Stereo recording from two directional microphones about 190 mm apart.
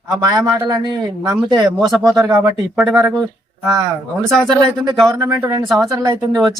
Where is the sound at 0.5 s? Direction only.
20° right (ahead or behind).